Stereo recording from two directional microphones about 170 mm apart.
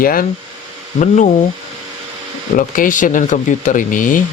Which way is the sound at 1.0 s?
45° left (ahead or behind).